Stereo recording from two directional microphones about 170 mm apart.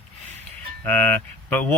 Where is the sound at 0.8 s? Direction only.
10° left (ahead or behind).